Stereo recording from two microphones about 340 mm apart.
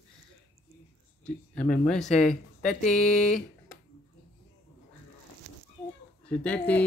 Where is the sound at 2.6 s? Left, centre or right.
Left.